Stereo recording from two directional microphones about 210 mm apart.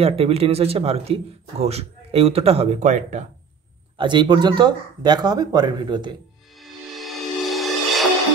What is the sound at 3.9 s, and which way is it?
Speech, 20° right (ahead or behind).